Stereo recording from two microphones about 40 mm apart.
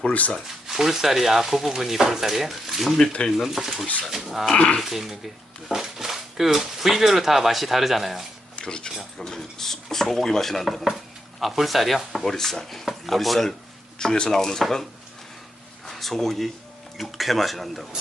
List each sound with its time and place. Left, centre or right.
0.4 s speech: centre
4.5 s speech: left
4.8 s speech: centre
8.5 s speech: left
9.1 s speech: centre
12.2 s speech: centre
14.0 s speech: centre
15.9 s speech: centre